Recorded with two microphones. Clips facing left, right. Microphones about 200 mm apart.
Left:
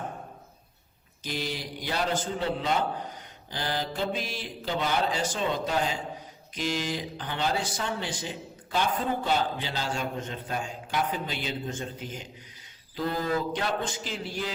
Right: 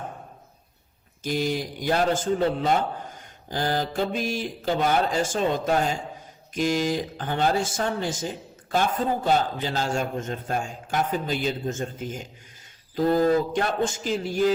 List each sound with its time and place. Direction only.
1.2 s speech: 45° right (ahead or behind)